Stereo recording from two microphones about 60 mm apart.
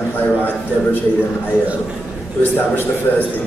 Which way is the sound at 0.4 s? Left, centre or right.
Left.